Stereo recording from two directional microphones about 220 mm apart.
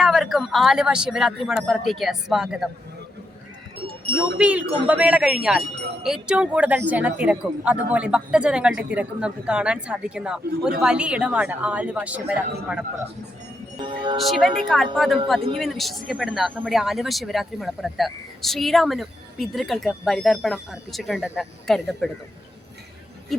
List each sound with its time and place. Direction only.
0.0 s speech: centre (ahead or behind)
4.4 s speech: 5° right (ahead or behind)
13.7 s speech: 20° right (ahead or behind)
14.3 s speech: centre (ahead or behind)